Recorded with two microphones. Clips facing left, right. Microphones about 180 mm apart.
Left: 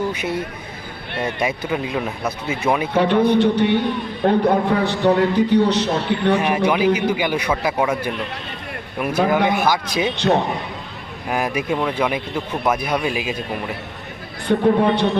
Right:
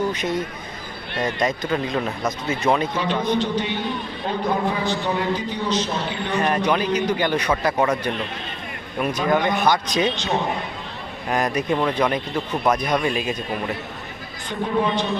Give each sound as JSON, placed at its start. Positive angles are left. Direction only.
{"t": 0.1, "sound": "a man's voice", "side_deg": 10}
{"t": 2.9, "sound": "a man's voice", "side_deg": 60}
{"t": 6.4, "sound": "a man's voice", "side_deg": 10}
{"t": 11.3, "sound": "a man's voice", "side_deg": 5}
{"t": 14.4, "sound": "a man's voice", "side_deg": 65}